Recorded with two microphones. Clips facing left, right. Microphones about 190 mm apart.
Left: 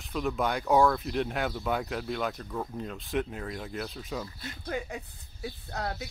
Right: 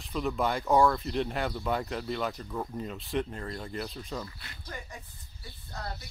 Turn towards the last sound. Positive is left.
turn(degrees=75)  # may be behind; listen again after turning